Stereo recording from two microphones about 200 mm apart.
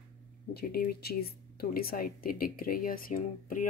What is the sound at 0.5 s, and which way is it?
Speech, 50° left (ahead or behind).